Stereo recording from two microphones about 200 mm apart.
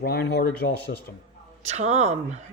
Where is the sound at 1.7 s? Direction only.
35° right (ahead or behind).